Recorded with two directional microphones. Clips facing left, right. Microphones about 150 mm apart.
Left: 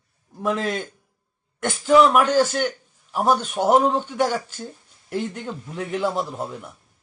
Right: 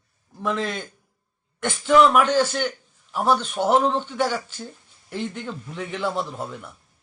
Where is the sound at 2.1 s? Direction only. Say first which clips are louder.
Left 1 dB; 40° left (ahead or behind).